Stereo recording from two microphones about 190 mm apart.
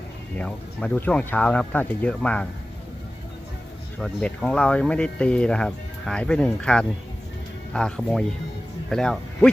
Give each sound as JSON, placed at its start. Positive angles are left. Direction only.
{"t": 0.3, "sound": "speech", "side_deg": 5}
{"t": 4.0, "sound": "speech", "side_deg": 5}